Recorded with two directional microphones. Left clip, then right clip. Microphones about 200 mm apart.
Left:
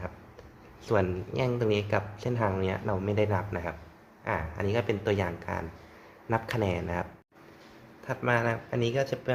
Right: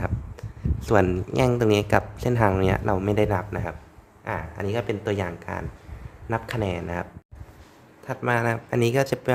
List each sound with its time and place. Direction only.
0.0 s speech: 25° right (ahead or behind)
8.8 s speech: 35° right (ahead or behind)